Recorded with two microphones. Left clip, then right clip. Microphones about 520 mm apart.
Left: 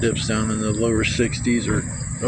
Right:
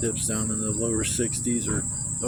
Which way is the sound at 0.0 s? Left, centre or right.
Right.